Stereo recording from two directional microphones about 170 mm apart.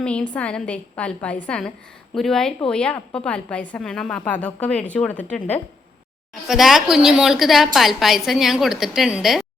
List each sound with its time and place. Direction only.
0.0 s a woman's voice: 5° left (ahead or behind)